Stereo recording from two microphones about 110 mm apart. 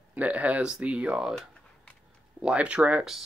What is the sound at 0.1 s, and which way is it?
Speech, 15° right (ahead or behind).